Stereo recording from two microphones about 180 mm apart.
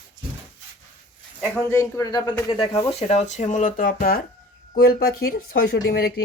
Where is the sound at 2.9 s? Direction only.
35° left (ahead or behind).